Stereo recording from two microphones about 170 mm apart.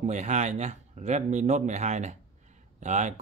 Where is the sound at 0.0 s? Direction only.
45° right (ahead or behind).